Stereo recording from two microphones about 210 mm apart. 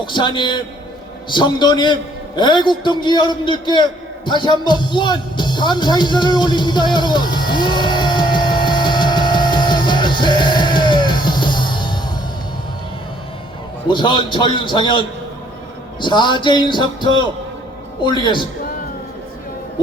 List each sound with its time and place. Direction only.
0.0 s a man's voice: 20° left (ahead or behind)
4.3 s music: 20° left (ahead or behind)
13.8 s a man's voice: 20° left (ahead or behind)